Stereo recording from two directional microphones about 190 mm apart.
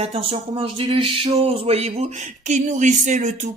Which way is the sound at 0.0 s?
30° right (ahead or behind).